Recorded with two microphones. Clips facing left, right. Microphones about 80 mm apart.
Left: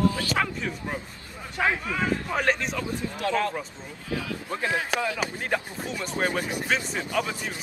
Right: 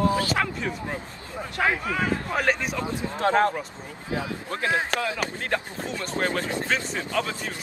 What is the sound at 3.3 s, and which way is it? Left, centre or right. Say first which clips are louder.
Speech: right 5 dB; right.